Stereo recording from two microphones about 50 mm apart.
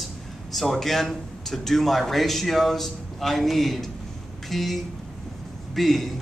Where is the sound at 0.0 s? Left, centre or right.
Centre.